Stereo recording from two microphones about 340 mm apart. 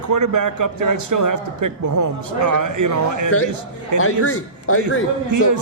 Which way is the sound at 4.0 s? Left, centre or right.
Left.